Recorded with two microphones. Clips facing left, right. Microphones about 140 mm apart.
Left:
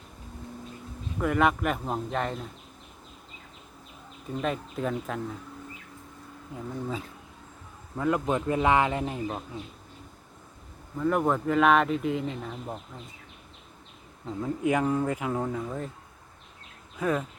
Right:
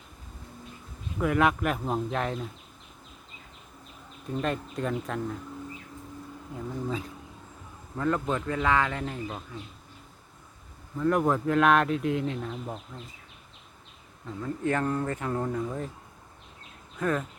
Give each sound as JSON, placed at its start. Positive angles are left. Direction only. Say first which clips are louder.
{"t": 1.2, "sound": "speech", "louder": "even", "side_deg": 0}
{"t": 4.3, "sound": "speech", "louder": "even", "side_deg": 0}
{"t": 6.5, "sound": "speech", "louder": "right 1 dB", "side_deg": 0}
{"t": 10.9, "sound": "speech", "louder": "right 1 dB", "side_deg": 5}
{"t": 14.4, "sound": "speech", "louder": "left 2 dB", "side_deg": 10}
{"t": 17.0, "sound": "speech", "louder": "left 1 dB", "side_deg": 10}